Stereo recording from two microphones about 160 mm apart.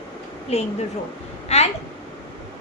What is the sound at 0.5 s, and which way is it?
Speech, 40° left (ahead or behind).